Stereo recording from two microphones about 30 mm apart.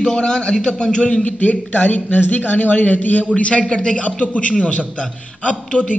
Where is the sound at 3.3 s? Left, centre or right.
Left.